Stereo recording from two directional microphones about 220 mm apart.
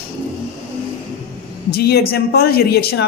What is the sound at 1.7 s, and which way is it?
A man's voice, 45° left (ahead or behind).